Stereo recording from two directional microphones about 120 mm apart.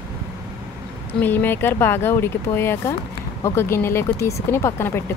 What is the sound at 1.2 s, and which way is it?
Speech, 15° left (ahead or behind).